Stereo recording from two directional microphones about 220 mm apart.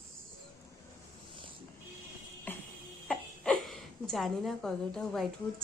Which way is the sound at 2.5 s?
10° left (ahead or behind).